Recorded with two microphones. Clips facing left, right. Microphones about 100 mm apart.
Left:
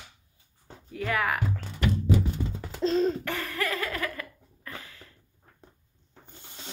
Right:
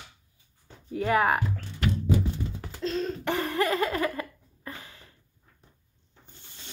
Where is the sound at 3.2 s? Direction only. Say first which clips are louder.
Right 5 dB; 30° right (ahead or behind).